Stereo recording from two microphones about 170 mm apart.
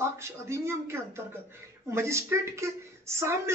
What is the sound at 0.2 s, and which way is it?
Speech, 15° right (ahead or behind).